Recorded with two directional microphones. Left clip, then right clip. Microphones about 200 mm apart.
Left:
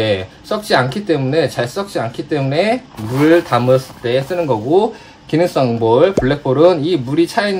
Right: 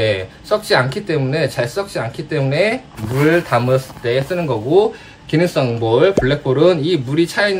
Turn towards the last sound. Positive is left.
turn(degrees=50)  # may be behind; listen again after turning